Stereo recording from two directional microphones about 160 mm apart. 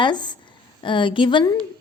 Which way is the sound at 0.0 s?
30° left (ahead or behind).